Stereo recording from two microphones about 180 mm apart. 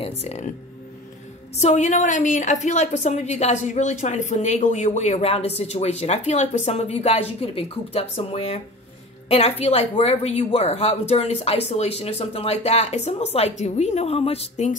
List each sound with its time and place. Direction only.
0.2 s a woman's voice: 35° left (ahead or behind)
1.6 s a woman's voice: 40° left (ahead or behind)